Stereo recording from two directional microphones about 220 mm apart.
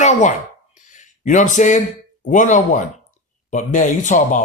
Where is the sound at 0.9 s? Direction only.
35° left (ahead or behind).